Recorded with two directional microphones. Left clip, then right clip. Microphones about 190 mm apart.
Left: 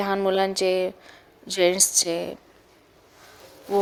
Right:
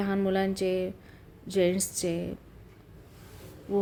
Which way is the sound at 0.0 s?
20° left (ahead or behind).